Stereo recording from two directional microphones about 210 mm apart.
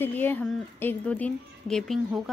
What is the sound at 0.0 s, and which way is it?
Speech, 10° left (ahead or behind).